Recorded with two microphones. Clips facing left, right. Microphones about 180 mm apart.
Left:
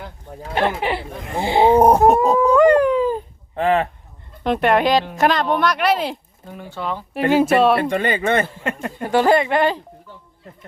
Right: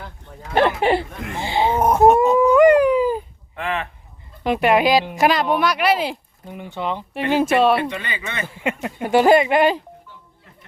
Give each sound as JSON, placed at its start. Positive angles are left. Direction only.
{"t": 0.5, "sound": "speech", "side_deg": -40}
{"t": 1.3, "sound": "speech", "side_deg": 35}
{"t": 2.6, "sound": "dog", "side_deg": -10}
{"t": 3.5, "sound": "a sound", "side_deg": 35}
{"t": 4.4, "sound": "speech", "side_deg": -5}
{"t": 6.5, "sound": "speech", "side_deg": -20}
{"t": 7.3, "sound": "speech", "side_deg": 0}
{"t": 7.9, "sound": "speech", "side_deg": 50}
{"t": 8.6, "sound": "speech", "side_deg": -5}